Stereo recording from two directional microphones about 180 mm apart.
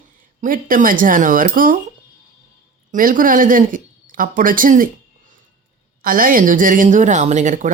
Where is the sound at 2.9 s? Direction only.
50° right (ahead or behind).